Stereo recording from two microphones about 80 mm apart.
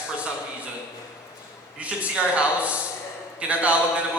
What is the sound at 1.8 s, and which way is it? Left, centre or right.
A man's voice, centre.